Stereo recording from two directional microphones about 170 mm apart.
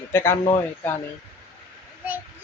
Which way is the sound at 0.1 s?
15° left (ahead or behind).